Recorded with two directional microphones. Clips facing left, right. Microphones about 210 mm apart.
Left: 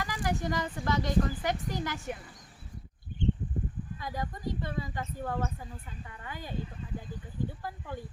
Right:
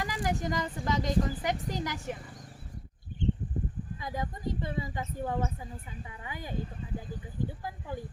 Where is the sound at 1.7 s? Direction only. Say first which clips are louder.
Even; 15° right (ahead or behind).